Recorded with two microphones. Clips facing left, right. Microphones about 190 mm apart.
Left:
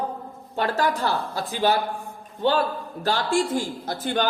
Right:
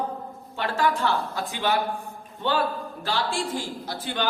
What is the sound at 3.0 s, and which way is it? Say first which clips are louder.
A man's voice: left 5 dB; 45° left (ahead or behind).